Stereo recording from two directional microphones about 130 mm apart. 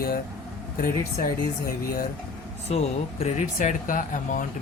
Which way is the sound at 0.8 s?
90° left.